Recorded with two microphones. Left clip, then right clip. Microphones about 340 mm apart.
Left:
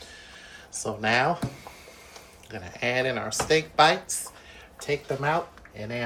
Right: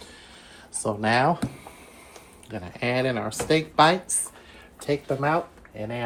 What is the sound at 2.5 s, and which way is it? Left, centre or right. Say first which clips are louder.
Speech: right 1 dB; centre.